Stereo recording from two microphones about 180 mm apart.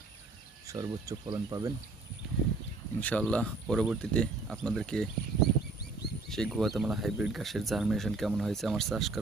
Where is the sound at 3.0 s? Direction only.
5° left (ahead or behind).